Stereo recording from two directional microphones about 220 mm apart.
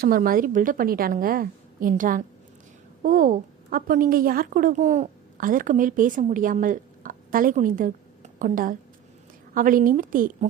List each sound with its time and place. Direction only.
0.0 s a woman's voice: 40° right (ahead or behind)